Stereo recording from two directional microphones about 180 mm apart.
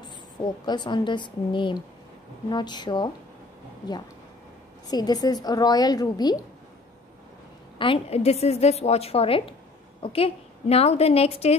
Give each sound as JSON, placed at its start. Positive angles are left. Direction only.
{"t": 0.4, "sound": "a woman's voice", "side_deg": 25}
{"t": 4.8, "sound": "a woman's voice", "side_deg": 20}
{"t": 7.8, "sound": "a woman's voice", "side_deg": 30}